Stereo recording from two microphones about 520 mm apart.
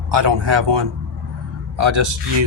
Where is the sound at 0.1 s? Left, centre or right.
Right.